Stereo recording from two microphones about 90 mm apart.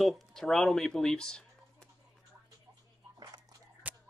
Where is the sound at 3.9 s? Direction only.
20° right (ahead or behind).